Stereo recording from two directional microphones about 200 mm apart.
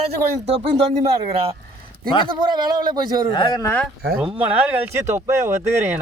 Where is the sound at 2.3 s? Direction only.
20° right (ahead or behind).